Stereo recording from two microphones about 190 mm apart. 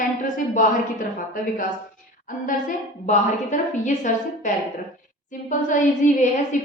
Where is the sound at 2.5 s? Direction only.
40° left (ahead or behind).